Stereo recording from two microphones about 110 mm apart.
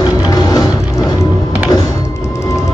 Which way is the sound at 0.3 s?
35° left (ahead or behind).